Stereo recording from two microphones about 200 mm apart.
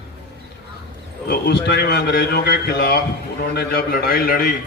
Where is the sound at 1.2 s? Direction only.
55° left (ahead or behind).